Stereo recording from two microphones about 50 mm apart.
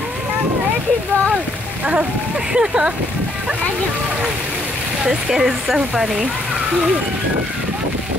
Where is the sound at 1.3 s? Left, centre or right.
Right.